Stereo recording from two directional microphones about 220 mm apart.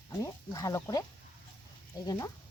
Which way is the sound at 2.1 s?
15° left (ahead or behind).